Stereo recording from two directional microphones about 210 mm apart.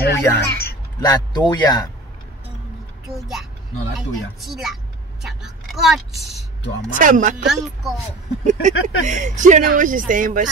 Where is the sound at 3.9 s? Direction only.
Centre (ahead or behind).